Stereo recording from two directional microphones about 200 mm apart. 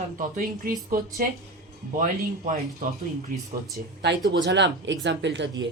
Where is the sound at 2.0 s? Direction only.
40° right (ahead or behind).